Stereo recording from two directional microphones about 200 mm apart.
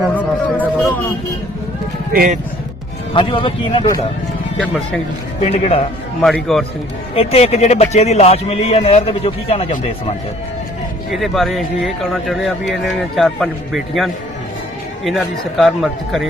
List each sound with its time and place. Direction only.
0.0 s a sound: 10° left (ahead or behind)
2.1 s speech: 45° right (ahead or behind)
3.2 s speech: 25° left (ahead or behind)
5.4 s speech: 30° left (ahead or behind)
6.2 s speech: centre (ahead or behind)
7.2 s speech: 30° left (ahead or behind)
11.1 s speech: centre (ahead or behind)